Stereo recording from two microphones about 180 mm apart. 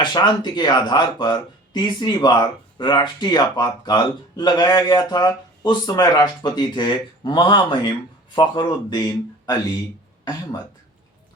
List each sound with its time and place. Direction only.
0.0 s speech: 25° left (ahead or behind)